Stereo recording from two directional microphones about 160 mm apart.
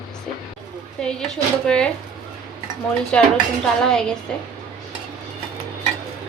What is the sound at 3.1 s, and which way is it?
Speech, 5° left (ahead or behind).